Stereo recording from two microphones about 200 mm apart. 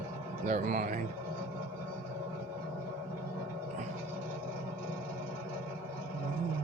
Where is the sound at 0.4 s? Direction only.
40° right (ahead or behind).